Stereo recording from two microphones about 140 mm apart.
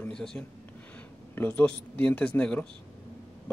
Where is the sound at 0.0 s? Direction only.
5° left (ahead or behind).